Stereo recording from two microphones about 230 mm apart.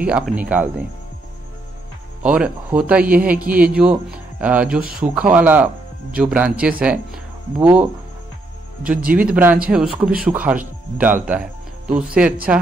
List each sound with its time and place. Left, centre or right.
0.0 s speech: centre
2.2 s a man's voice: centre
8.8 s a man's voice: centre